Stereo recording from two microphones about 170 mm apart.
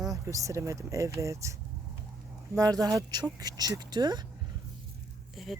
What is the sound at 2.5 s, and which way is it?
Speech, 20° right (ahead or behind).